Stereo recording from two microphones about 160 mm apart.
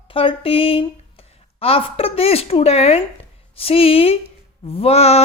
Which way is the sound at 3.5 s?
35° left (ahead or behind).